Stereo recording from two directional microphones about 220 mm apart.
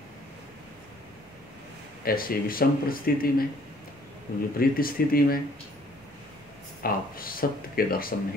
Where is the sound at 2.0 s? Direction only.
40° left (ahead or behind).